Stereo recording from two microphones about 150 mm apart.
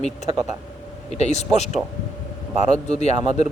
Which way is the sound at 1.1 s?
50° left (ahead or behind).